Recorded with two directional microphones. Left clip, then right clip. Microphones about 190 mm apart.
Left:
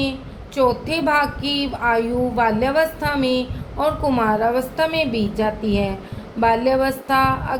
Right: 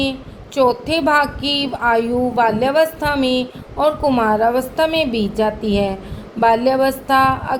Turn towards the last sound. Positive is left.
turn(degrees=-30)  # may be behind; listen again after turning